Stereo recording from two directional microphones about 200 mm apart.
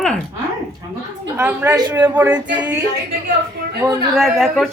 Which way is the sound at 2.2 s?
5° right (ahead or behind).